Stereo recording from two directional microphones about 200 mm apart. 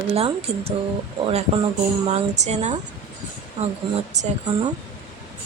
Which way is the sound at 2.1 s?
35° right (ahead or behind).